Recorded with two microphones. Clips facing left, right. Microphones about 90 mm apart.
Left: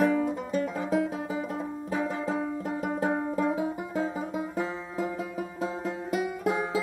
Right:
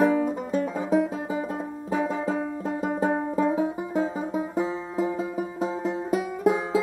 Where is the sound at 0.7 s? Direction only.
30° right (ahead or behind).